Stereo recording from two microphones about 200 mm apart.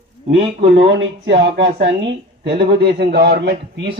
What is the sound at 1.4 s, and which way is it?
A man's voice, 60° right (ahead or behind).